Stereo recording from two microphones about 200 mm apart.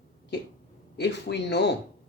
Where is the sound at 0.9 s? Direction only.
55° left (ahead or behind).